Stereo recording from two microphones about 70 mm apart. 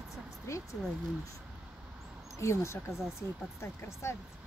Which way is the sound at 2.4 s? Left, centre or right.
Left.